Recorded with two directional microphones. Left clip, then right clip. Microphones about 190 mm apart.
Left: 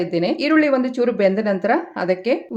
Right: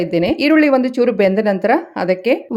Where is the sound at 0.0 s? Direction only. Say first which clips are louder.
Right 4 dB; 30° right (ahead or behind).